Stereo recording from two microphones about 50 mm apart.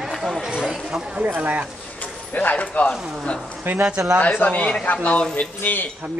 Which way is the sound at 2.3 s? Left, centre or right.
Left.